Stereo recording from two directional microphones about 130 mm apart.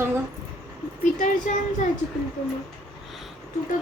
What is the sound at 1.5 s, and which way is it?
Speech, 60° left (ahead or behind).